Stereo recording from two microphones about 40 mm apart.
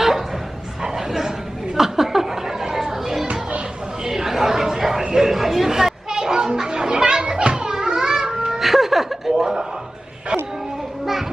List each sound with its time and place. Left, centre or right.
0.8 s a sound: centre
1.7 s chatter: centre
5.1 s children playing: centre
8.6 s ice cream truck: centre
9.4 s chuckle: centre
11.0 s children playing: centre